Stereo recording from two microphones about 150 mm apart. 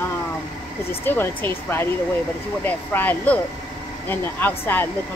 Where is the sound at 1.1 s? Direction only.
15° left (ahead or behind).